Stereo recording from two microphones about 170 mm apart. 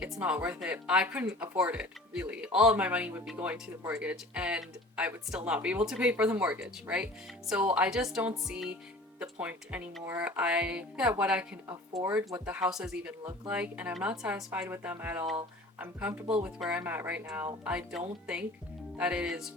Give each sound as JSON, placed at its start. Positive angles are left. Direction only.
{"t": 0.0, "sound": "speech", "side_deg": -5}
{"t": 11.7, "sound": "speech", "side_deg": -20}
{"t": 12.5, "sound": "speech", "side_deg": -5}